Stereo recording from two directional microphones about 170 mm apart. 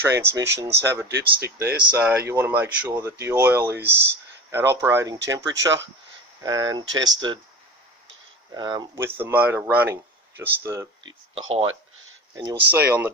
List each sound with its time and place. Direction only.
0.2 s speech: 15° right (ahead or behind)
8.5 s speech: 25° right (ahead or behind)
9.0 s speech: 15° right (ahead or behind)
11.3 s speech: 30° right (ahead or behind)
12.7 s speech: 10° right (ahead or behind)